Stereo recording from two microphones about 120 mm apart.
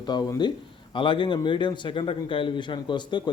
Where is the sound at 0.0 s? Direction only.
35° left (ahead or behind).